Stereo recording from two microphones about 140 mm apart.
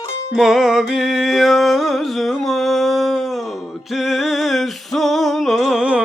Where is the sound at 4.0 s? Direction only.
Centre (ahead or behind).